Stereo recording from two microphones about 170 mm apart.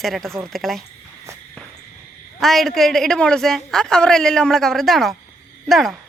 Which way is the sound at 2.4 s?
Centre (ahead or behind).